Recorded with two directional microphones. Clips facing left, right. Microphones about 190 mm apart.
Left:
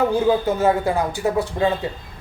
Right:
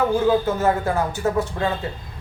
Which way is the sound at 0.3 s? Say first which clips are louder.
Left 1 dB; 15° left (ahead or behind).